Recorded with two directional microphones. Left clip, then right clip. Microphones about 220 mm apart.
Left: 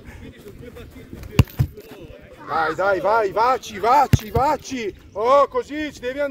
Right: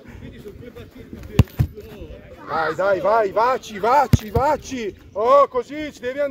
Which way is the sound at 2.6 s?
35° left (ahead or behind).